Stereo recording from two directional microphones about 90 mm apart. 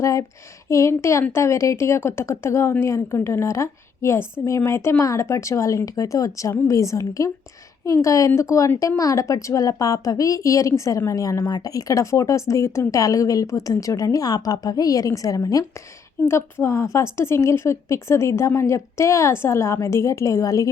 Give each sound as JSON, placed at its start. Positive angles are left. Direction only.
{"t": 0.0, "sound": "a sound", "side_deg": 35}
{"t": 0.7, "sound": "a woman's voice", "side_deg": 35}
{"t": 16.2, "sound": "a woman's voice", "side_deg": 25}